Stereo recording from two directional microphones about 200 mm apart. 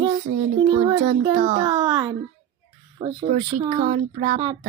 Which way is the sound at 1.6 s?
20° right (ahead or behind).